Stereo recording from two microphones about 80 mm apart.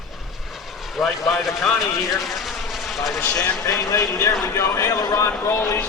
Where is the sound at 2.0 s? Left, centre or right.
Centre.